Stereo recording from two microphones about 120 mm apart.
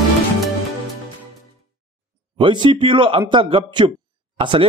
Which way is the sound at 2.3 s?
45° right (ahead or behind).